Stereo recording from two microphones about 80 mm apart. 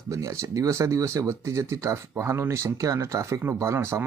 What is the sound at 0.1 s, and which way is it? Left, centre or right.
Speech, right.